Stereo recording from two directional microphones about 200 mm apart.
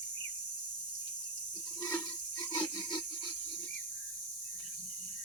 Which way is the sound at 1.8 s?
15° left (ahead or behind).